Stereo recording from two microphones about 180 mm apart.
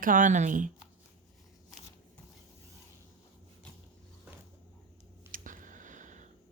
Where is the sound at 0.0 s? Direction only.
45° right (ahead or behind).